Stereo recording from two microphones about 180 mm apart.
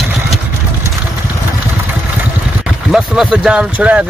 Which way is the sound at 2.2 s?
5° right (ahead or behind).